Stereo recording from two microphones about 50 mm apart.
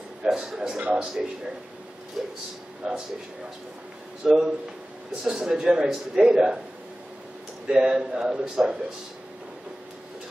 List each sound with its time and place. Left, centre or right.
0.2 s a man's voice: centre
4.2 s a man's voice: centre
7.6 s a man's voice: centre